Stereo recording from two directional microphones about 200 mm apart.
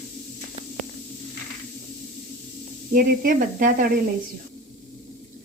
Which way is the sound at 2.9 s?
45° right (ahead or behind).